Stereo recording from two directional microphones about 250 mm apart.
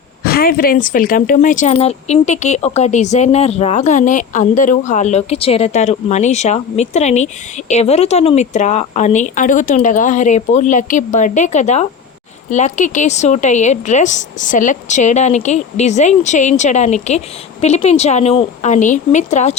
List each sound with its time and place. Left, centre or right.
0.3 s a woman's voice: left